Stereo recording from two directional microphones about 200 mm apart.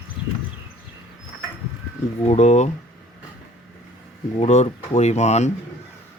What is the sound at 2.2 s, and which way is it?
Speech, 35° left (ahead or behind).